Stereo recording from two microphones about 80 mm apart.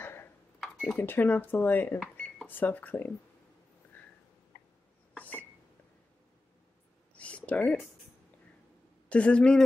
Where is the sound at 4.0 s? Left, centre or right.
Left.